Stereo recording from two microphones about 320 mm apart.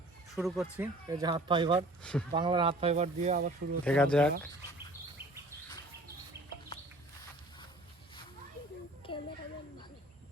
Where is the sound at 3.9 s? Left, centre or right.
Centre.